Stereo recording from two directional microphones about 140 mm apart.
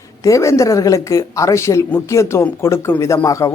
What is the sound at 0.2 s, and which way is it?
Speech, 20° left (ahead or behind).